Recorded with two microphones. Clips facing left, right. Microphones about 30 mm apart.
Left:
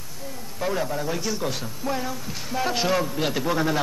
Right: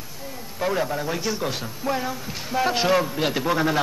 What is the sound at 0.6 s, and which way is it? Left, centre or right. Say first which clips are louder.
A man's voice: right 2 dB; centre.